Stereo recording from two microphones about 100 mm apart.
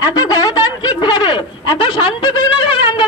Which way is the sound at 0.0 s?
40° left (ahead or behind).